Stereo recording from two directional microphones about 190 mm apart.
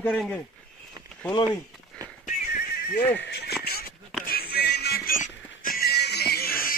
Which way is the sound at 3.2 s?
60° left (ahead or behind).